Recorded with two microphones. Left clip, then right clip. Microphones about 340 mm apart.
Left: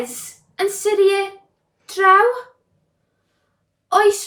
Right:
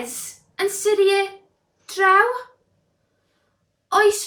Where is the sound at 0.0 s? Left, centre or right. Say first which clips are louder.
Left 4 dB; centre.